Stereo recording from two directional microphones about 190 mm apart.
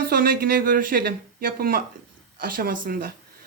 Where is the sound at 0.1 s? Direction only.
50° right (ahead or behind).